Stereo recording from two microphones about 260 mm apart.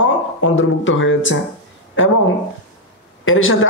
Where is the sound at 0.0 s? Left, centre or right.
Left.